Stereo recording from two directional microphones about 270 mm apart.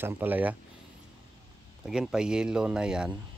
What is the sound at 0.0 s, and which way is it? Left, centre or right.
Speech, centre.